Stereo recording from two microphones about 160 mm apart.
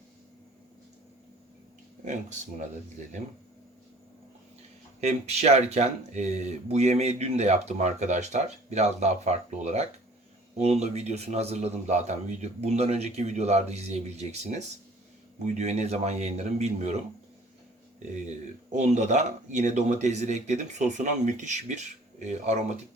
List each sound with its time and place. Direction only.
4.9 s speech: 45° right (ahead or behind)
18.7 s speech: 45° right (ahead or behind)